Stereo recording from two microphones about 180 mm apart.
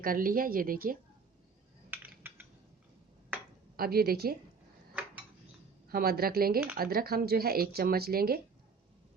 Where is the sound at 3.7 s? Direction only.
55° right (ahead or behind).